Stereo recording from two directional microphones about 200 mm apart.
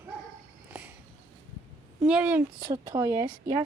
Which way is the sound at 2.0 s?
5° right (ahead or behind).